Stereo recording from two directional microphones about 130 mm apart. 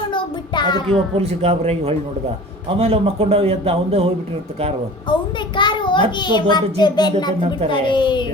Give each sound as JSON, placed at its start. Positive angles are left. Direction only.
{"t": 0.1, "sound": "child singing", "side_deg": 35}
{"t": 1.1, "sound": "a man's voice", "side_deg": -50}
{"t": 5.5, "sound": "a child's voice", "side_deg": 35}